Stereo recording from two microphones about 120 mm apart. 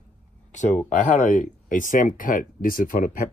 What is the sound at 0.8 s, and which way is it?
Speech, 90° left.